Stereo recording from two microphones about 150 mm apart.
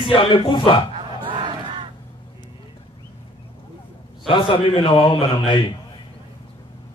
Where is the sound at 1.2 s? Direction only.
35° right (ahead or behind).